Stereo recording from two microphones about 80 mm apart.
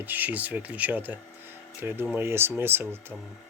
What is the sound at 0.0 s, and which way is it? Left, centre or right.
Speech, right.